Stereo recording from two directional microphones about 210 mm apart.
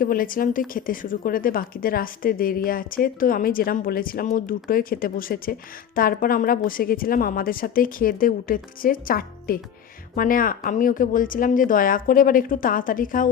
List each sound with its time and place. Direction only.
0.0 s a woman's voice: 40° left (ahead or behind)